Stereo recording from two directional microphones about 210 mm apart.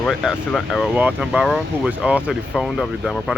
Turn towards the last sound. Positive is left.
turn(degrees=0)  # may be behind; listen again after turning